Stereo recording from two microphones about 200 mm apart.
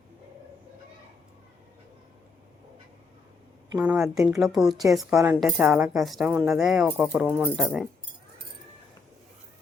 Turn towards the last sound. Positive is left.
turn(degrees=0)  # may be behind; listen again after turning